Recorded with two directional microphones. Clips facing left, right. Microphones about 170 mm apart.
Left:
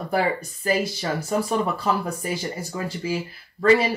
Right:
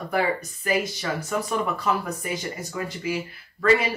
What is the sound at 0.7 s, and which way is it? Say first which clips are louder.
Speech: left 2 dB; 35° left (ahead or behind).